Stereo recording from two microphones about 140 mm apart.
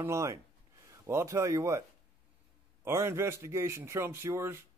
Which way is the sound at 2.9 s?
20° right (ahead or behind).